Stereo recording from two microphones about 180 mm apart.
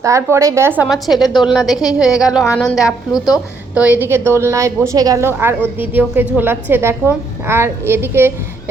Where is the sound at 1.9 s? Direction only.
5° right (ahead or behind).